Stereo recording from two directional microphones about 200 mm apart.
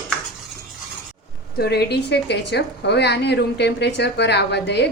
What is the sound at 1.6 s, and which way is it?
A woman's voice, 55° left (ahead or behind).